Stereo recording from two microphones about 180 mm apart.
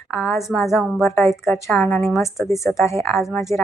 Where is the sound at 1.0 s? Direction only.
15° left (ahead or behind).